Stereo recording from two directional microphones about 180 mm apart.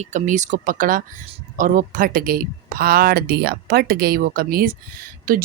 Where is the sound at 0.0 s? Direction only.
40° right (ahead or behind).